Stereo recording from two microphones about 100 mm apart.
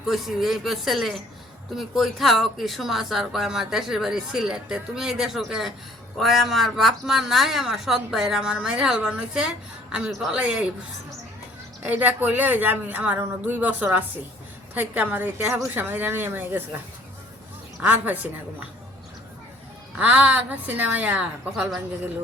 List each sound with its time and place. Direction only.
0.1 s a woman's voice: centre (ahead or behind)
11.8 s a woman's voice: 15° right (ahead or behind)
17.7 s a woman's voice: 15° right (ahead or behind)
20.0 s a woman's voice: 15° right (ahead or behind)